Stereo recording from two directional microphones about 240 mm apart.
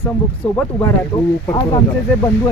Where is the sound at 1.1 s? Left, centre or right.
Centre.